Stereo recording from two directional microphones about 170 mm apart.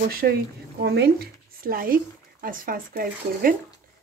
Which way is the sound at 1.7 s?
55° right (ahead or behind).